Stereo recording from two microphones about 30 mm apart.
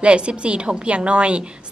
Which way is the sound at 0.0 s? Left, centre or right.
Right.